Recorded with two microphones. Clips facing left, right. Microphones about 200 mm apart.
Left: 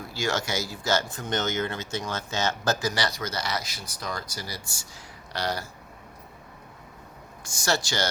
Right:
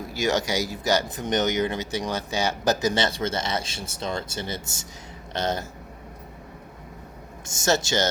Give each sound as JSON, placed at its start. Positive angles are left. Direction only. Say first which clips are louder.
{"t": 0.1, "sound": "speech", "louder": "right 4 dB", "side_deg": -15}
{"t": 7.4, "sound": "speech", "louder": "right 4 dB", "side_deg": -20}